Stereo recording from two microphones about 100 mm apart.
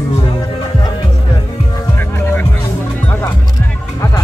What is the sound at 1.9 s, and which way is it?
Music, 20° left (ahead or behind).